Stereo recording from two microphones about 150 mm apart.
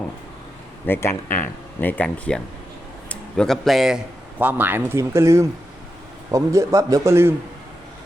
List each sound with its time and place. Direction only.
0.9 s a man's voice: 15° left (ahead or behind); by 7.3 s 15° right (ahead or behind)